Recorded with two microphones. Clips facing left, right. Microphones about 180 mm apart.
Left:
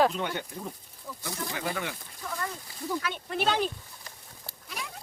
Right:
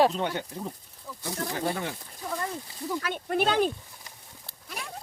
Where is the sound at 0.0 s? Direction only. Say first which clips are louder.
Right 2 dB; 30° right (ahead or behind).